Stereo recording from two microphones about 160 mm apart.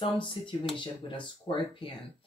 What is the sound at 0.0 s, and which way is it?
Speech, 30° left (ahead or behind).